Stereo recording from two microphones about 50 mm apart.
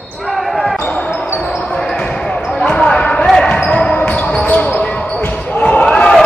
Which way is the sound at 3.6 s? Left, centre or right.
Left.